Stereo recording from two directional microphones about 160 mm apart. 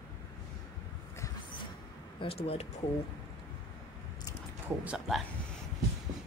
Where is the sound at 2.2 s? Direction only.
35° left (ahead or behind).